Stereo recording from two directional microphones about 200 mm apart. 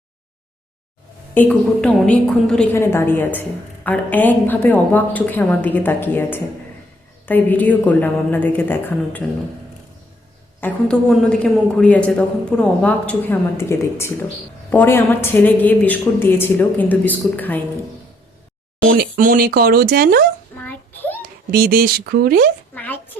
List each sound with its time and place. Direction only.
1.3 s a man's voice: 5° left (ahead or behind)
10.6 s a man's voice: 5° left (ahead or behind)
18.9 s speech: 45° right (ahead or behind)
20.7 s a sound: 10° left (ahead or behind)
21.5 s speech: 45° right (ahead or behind)
22.7 s speech: 10° left (ahead or behind)